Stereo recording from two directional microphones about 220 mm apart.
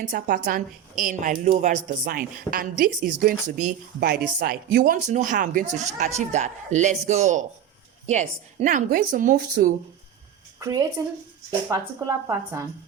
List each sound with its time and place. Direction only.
0.0 s a woman's voice: 40° right (ahead or behind)
10.6 s a woman's voice: 15° right (ahead or behind)